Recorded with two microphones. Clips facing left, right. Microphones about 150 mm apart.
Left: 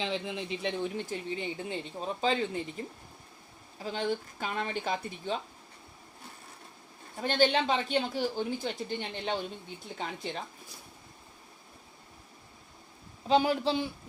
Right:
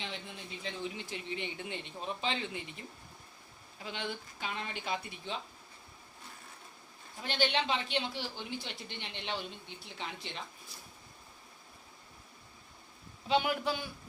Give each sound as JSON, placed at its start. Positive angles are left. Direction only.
{"t": 0.0, "sound": "speech", "side_deg": 90}
{"t": 0.8, "sound": "speech", "side_deg": 50}
{"t": 1.3, "sound": "speech", "side_deg": 35}
{"t": 3.8, "sound": "speech", "side_deg": 40}
{"t": 7.2, "sound": "speech", "side_deg": 45}
{"t": 13.2, "sound": "a man's voice", "side_deg": 35}